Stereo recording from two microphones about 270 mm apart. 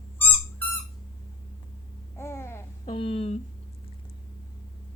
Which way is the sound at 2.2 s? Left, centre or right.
Centre.